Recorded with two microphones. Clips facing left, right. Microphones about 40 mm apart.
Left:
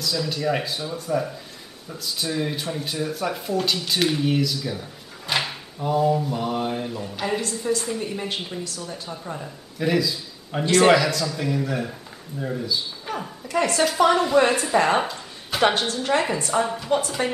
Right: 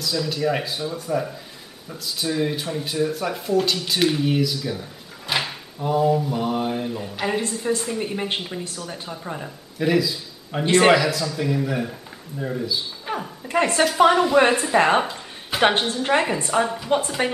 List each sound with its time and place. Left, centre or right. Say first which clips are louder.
0.0 s speech: right 2 dB; centre
7.1 s a woman's voice: right 1 dB; centre
9.8 s a man's voice: right 2 dB; centre
10.6 s a woman's voice: right 1 dB; right
10.9 s speech: even; centre
13.5 s a woman's voice: right 2 dB; right
14.1 s a woman's voice: right 2 dB; centre
15.0 s a sound: right 2 dB; centre
15.9 s a woman's voice: right 2 dB; right
16.6 s speech: right 1 dB; centre
17.2 s a woman's voice: right 1 dB; right